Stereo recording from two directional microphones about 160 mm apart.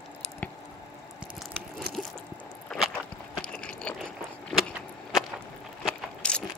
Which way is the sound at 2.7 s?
Centre (ahead or behind).